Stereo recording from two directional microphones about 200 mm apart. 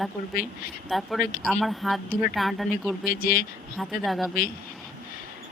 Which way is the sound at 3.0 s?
45° left (ahead or behind).